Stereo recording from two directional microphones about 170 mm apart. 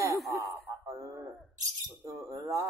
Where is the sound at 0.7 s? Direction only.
20° right (ahead or behind).